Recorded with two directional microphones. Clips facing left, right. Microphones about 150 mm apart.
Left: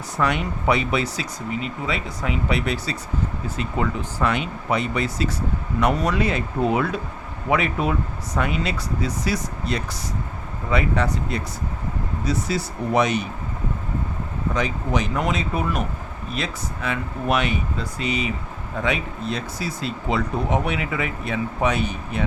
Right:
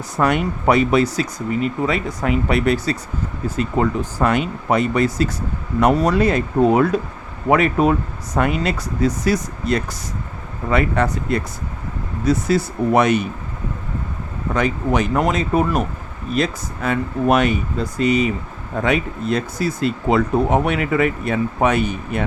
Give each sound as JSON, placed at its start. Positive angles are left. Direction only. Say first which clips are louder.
{"t": 0.2, "sound": "speech", "louder": "right 5 dB", "side_deg": -45}
{"t": 14.5, "sound": "speech", "louder": "right 6 dB", "side_deg": -55}